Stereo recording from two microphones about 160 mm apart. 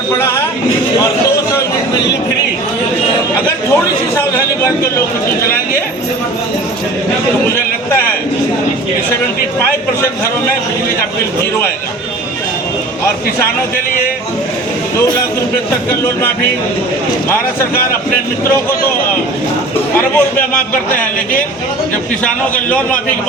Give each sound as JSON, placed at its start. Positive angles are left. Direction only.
{"t": 0.2, "sound": "speech", "side_deg": 15}
{"t": 20.1, "sound": "a man's voice", "side_deg": 10}
{"t": 22.2, "sound": "a man's voice", "side_deg": 10}